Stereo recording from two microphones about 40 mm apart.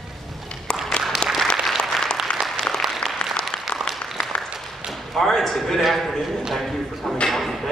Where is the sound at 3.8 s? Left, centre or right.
Centre.